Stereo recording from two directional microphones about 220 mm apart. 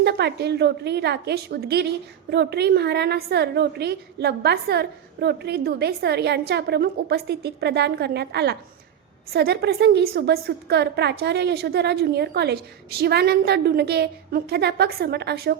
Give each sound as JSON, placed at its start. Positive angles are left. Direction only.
{"t": 0.0, "sound": "a woman's voice", "side_deg": -50}